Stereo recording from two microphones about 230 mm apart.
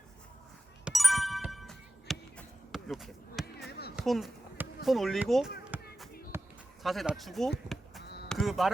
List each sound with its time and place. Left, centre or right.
0.9 s music: centre
3.7 s basketball bounce: left
3.9 s a sound: centre
5.7 s basketball bounce: centre
6.8 s speech: centre